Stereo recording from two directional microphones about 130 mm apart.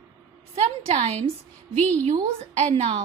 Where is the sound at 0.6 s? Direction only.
55° right (ahead or behind).